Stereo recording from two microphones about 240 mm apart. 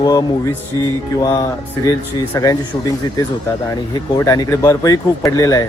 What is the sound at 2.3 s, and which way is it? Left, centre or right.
Speech, centre.